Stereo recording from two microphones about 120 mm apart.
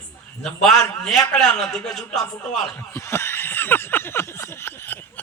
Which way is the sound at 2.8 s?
20° left (ahead or behind).